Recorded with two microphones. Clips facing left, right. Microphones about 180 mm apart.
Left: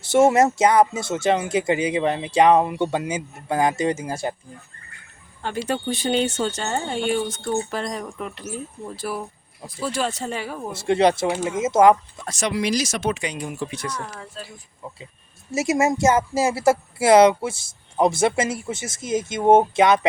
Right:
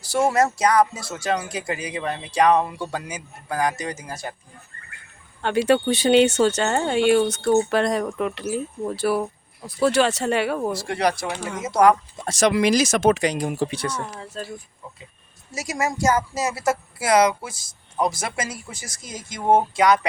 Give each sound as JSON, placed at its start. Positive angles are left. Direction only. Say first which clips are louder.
{"t": 0.0, "sound": "speech", "louder": "left 4 dB", "side_deg": 25}
{"t": 5.4, "sound": "speech", "louder": "right 7 dB", "side_deg": -75}
{"t": 10.7, "sound": "speech", "louder": "left 4 dB", "side_deg": 25}
{"t": 12.5, "sound": "speech", "louder": "right 4 dB", "side_deg": -55}
{"t": 13.6, "sound": "speech", "louder": "right 4 dB", "side_deg": -30}
{"t": 14.4, "sound": "speech", "louder": "right 7 dB", "side_deg": -45}
{"t": 15.5, "sound": "speech", "louder": "left 6 dB", "side_deg": 25}